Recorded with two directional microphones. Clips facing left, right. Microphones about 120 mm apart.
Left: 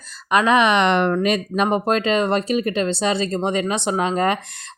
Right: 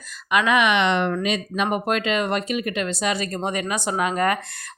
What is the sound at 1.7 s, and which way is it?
Speech, 30° left (ahead or behind).